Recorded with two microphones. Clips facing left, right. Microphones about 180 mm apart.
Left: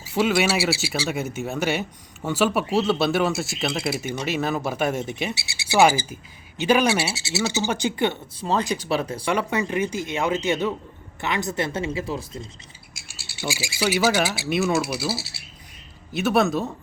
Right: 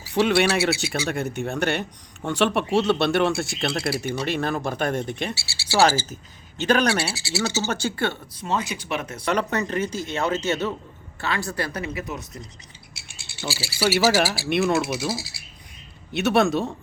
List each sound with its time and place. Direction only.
0.1 s speech: 5° left (ahead or behind)
5.3 s speech: 20° left (ahead or behind)
7.1 s speech: 20° left (ahead or behind)
8.4 s speech: 35° left (ahead or behind)
9.2 s speech: 10° left (ahead or behind); by 12.5 s 25° left (ahead or behind)
13.1 s speech: 5° left (ahead or behind)
13.8 s speech: 5° right (ahead or behind)